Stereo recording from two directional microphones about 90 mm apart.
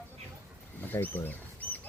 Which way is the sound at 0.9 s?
20° left (ahead or behind).